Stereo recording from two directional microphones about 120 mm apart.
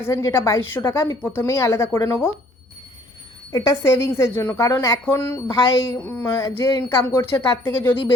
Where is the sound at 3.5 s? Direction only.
25° left (ahead or behind).